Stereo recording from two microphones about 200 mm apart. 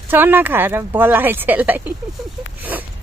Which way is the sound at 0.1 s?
10° right (ahead or behind).